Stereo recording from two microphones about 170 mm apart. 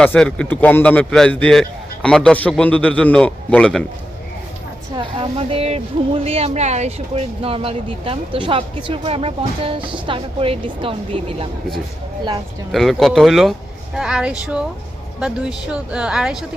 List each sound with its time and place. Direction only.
0.0 s a man's voice: 5° left (ahead or behind)
4.9 s speech: 30° right (ahead or behind)
12.7 s speech: centre (ahead or behind)